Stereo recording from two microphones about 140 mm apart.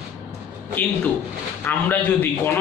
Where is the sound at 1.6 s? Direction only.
15° left (ahead or behind).